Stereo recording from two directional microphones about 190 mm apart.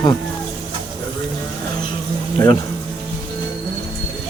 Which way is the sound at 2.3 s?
20° left (ahead or behind).